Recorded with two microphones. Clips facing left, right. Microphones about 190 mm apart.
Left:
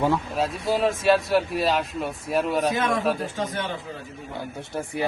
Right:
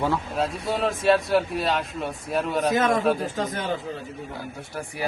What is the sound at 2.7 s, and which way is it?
Speech, 40° right (ahead or behind).